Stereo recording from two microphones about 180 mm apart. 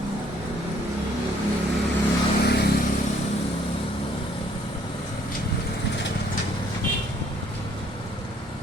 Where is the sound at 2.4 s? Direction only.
65° left (ahead or behind).